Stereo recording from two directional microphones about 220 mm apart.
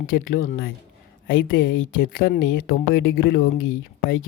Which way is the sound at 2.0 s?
40° left (ahead or behind).